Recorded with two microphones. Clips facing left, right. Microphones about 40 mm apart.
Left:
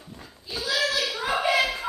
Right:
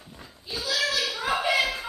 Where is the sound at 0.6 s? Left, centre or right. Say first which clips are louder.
Left 2 dB; left.